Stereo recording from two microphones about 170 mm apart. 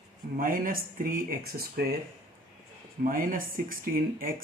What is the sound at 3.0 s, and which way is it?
Speech, 55° right (ahead or behind).